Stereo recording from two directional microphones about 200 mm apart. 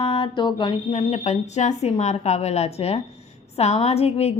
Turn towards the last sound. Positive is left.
turn(degrees=30)  # may be behind; listen again after turning